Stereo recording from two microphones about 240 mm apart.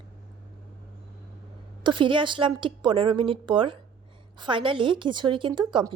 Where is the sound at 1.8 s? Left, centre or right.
Centre.